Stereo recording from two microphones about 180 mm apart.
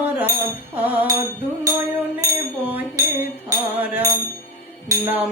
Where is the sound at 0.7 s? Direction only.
10° right (ahead or behind).